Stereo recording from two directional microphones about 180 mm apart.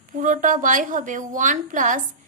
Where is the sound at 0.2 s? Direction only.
45° right (ahead or behind).